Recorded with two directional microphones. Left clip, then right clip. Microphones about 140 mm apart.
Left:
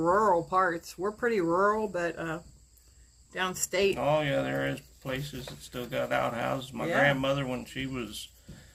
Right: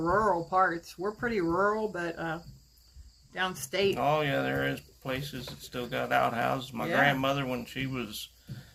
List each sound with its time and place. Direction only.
0.0 s speech: 30° left (ahead or behind)
3.9 s speech: 20° right (ahead or behind)